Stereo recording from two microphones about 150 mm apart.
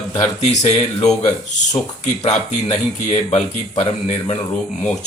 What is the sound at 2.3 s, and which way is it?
Speech, 45° left (ahead or behind).